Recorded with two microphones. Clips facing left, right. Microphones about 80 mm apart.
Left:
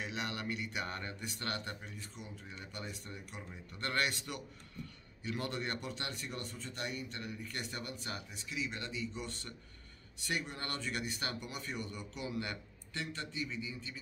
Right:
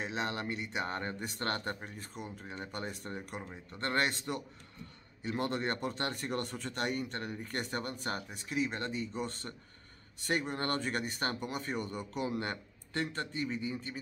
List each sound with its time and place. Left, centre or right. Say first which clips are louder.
0.0 s speech: right 4 dB; right
3.7 s speech: right 3 dB; right